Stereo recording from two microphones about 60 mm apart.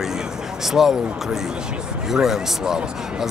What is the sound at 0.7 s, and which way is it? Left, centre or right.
Speech, centre.